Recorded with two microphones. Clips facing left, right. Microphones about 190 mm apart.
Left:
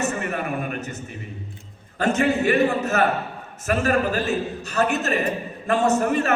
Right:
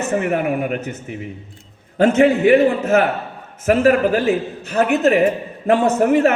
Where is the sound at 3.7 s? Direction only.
65° right (ahead or behind).